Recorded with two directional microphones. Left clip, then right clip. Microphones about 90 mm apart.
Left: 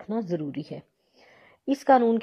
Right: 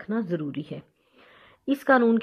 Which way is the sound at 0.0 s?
45° left (ahead or behind).